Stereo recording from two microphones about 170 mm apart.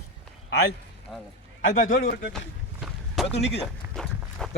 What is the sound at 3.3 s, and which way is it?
Speech, 85° left.